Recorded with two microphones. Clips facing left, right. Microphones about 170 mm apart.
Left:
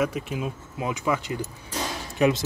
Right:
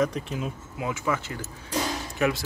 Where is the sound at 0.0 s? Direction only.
10° left (ahead or behind).